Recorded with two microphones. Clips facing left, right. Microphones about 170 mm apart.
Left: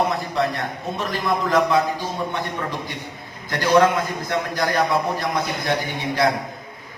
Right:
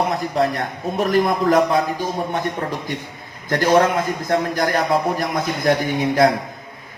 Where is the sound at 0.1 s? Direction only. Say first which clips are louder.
Right 3 dB; 45° right (ahead or behind).